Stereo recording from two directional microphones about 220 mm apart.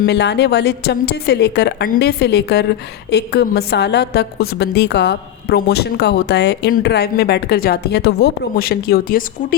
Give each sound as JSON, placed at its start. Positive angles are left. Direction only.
{"t": 0.0, "sound": "a woman's voice", "side_deg": 50}